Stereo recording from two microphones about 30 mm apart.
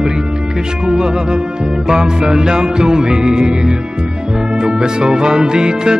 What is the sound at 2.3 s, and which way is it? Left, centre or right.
Music, right.